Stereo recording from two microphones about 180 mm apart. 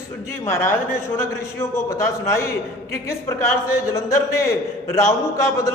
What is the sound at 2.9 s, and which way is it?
A man's voice, 15° left (ahead or behind).